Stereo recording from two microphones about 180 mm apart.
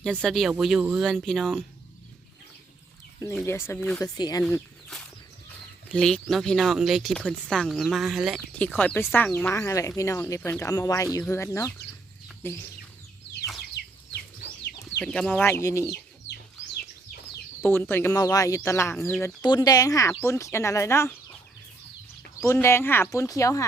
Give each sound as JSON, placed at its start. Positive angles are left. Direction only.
{"t": 0.0, "sound": "speech", "side_deg": 5}
{"t": 3.4, "sound": "speech", "side_deg": 15}
{"t": 3.8, "sound": "speech", "side_deg": 0}
{"t": 4.0, "sound": "speech", "side_deg": 20}
{"t": 5.9, "sound": "speech", "side_deg": 5}
{"t": 13.8, "sound": "a sound", "side_deg": 70}
{"t": 15.0, "sound": "speech", "side_deg": 5}
{"t": 17.6, "sound": "speech", "side_deg": 10}
{"t": 22.4, "sound": "speech", "side_deg": 15}